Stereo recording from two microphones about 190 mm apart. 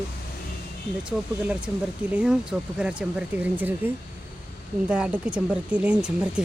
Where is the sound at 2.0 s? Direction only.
5° right (ahead or behind).